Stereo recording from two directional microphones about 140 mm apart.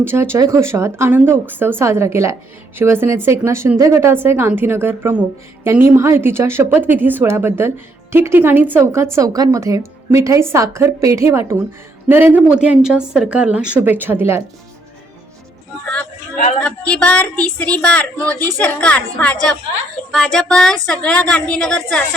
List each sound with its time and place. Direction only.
0.0 s a woman's voice: 15° right (ahead or behind)
16.6 s a woman's voice: 10° left (ahead or behind)